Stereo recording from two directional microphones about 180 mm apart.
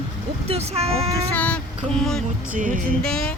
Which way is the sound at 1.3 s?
10° left (ahead or behind).